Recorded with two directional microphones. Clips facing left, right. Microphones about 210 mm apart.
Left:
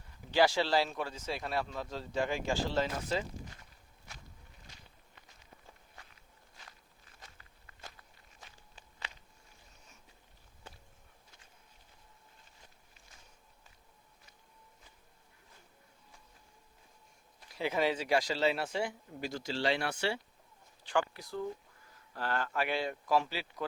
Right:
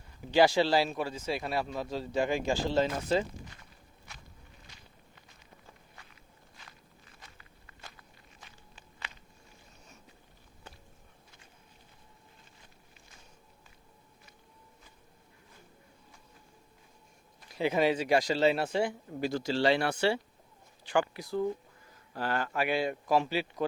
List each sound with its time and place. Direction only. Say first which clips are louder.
0.3 s speech: right 4 dB; 15° right (ahead or behind)
7.2 s walk: left 2 dB; 40° left (ahead or behind)
17.6 s speech: right 5 dB; 20° right (ahead or behind)
19.3 s speech: right 6 dB; 70° right (ahead or behind)
20.8 s speech: right 3 dB; 10° right (ahead or behind)